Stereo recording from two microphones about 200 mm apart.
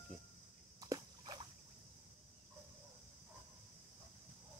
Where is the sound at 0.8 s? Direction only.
20° right (ahead or behind).